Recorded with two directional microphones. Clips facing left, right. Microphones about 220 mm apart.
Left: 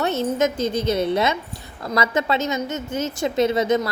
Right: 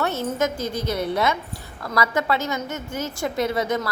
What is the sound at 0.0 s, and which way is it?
A woman's voice, 20° left (ahead or behind).